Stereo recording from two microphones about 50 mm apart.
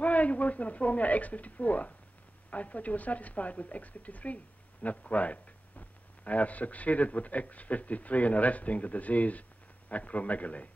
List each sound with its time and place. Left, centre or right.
0.0 s a man's voice: left